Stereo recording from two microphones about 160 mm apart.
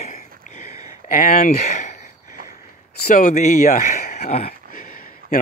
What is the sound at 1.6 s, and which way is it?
Speech, 50° left (ahead or behind).